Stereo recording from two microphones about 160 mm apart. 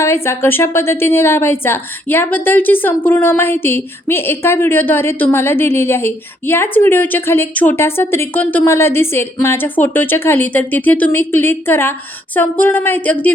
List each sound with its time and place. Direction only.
0.0 s a woman's voice: 15° left (ahead or behind)